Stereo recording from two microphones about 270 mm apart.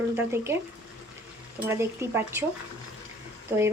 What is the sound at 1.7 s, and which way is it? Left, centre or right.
Speech, centre.